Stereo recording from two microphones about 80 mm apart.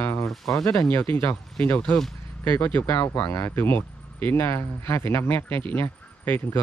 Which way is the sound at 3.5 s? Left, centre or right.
Left.